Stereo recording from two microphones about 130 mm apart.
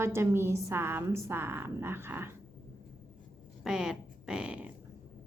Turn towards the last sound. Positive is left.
turn(degrees=-10)  # may be behind; listen again after turning